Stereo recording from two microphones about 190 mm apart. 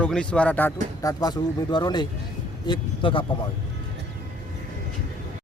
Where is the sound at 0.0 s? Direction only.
5° left (ahead or behind).